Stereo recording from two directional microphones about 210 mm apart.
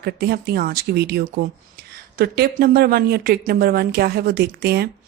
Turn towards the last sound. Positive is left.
turn(degrees=-50)  # may be behind; listen again after turning